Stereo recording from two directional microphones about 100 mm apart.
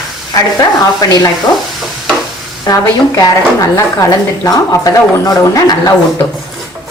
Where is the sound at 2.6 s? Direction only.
35° left (ahead or behind).